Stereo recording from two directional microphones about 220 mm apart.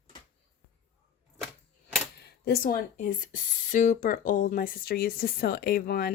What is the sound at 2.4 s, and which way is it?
Speech, 40° left (ahead or behind).